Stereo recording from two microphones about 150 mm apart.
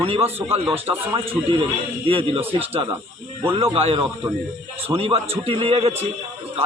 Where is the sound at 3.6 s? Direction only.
40° right (ahead or behind).